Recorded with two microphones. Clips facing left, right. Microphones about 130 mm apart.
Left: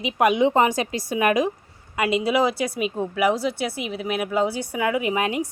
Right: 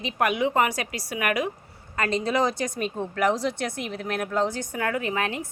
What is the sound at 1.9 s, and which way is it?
A woman's voice, 10° left (ahead or behind).